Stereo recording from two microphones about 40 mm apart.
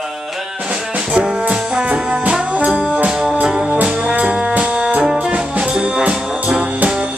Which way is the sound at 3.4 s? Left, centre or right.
Right.